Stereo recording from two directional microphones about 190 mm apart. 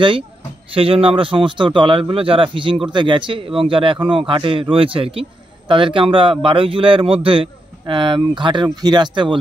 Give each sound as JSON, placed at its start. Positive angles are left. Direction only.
{"t": 0.7, "sound": "a man's voice", "side_deg": -30}